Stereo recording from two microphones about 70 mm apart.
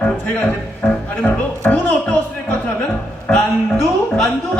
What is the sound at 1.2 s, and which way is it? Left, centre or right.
Speech, centre.